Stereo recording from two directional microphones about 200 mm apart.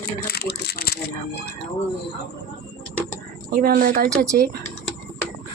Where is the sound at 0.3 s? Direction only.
55° left (ahead or behind).